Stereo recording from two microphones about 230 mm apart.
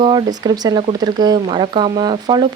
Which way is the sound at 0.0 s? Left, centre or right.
Centre.